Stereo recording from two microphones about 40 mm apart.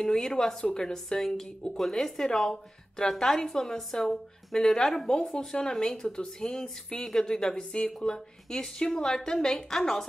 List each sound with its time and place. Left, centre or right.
0.0 s a woman's voice: centre